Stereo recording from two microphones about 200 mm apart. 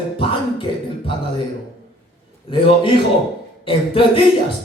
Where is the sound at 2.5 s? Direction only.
25° left (ahead or behind).